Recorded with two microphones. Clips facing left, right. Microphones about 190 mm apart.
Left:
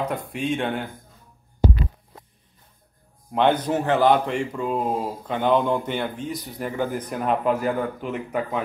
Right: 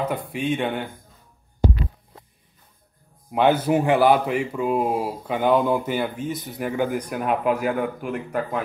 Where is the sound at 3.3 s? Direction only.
5° right (ahead or behind).